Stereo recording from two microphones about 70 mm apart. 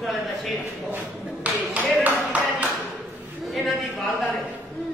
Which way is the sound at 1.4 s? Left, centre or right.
Right.